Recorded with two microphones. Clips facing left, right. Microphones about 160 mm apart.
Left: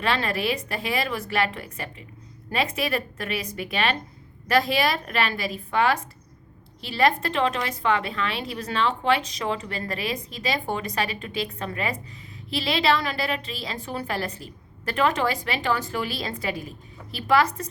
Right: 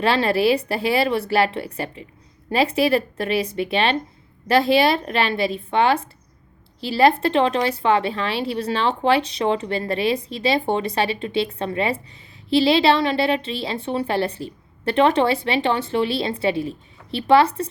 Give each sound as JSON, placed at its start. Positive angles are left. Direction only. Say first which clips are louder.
{"t": 0.0, "sound": "a woman's voice", "louder": "right 7 dB", "side_deg": -30}